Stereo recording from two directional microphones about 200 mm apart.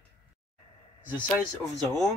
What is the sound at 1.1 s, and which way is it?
Speech, 5° left (ahead or behind).